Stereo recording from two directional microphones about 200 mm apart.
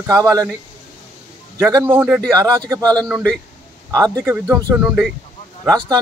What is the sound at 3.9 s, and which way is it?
Speech, 15° right (ahead or behind).